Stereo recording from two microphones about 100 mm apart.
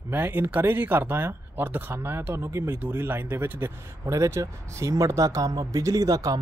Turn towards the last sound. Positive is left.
turn(degrees=-40)  # may be behind; listen again after turning